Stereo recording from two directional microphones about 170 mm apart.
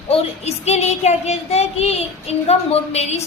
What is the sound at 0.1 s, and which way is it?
Child singing, 40° left (ahead or behind).